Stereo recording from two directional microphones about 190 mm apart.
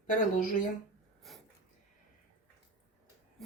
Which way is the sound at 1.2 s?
Centre (ahead or behind).